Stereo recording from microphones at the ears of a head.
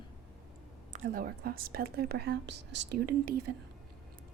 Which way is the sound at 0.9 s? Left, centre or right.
Right.